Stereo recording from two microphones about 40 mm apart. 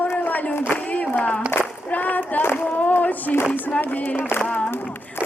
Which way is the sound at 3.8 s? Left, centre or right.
Left.